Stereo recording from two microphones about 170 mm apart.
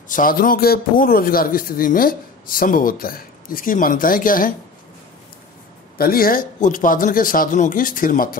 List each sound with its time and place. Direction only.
0.1 s a man's voice: 55° left (ahead or behind)
5.9 s a man's voice: 60° left (ahead or behind)